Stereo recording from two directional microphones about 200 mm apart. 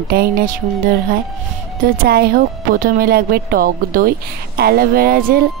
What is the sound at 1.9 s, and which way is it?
A woman's voice, 50° right (ahead or behind).